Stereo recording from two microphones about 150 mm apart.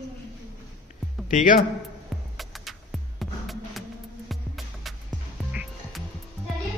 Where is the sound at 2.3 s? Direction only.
Centre (ahead or behind).